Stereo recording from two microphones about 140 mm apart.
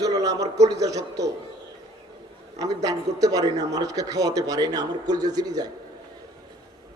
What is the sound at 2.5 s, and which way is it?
A man's voice, 25° right (ahead or behind).